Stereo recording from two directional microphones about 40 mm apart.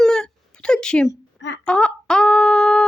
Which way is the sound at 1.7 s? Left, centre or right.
Left.